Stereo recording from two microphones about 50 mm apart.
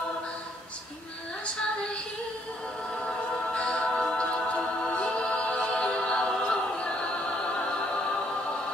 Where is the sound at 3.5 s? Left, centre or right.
Left.